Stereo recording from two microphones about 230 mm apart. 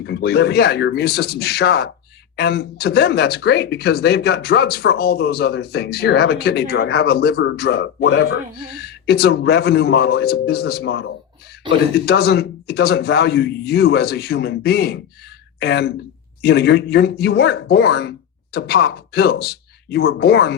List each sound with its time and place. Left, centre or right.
0.0 s speech: left